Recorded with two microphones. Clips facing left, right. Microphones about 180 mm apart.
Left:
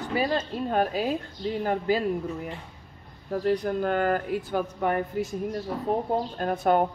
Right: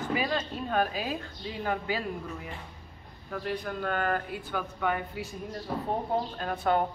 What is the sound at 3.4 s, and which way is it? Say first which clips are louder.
Speech: left 8 dB; 40° left (ahead or behind).